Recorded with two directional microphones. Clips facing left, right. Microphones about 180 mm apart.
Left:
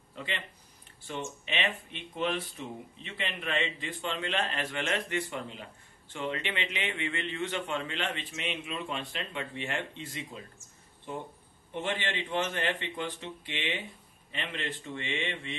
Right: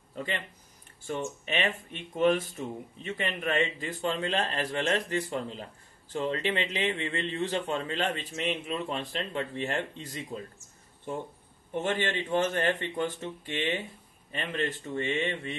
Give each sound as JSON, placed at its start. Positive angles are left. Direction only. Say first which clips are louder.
{"t": 0.1, "sound": "a sound", "louder": "right 4 dB", "side_deg": -45}
{"t": 1.0, "sound": "a man's voice", "louder": "right 4 dB", "side_deg": -45}
{"t": 11.7, "sound": "speech", "louder": "right 4 dB", "side_deg": -45}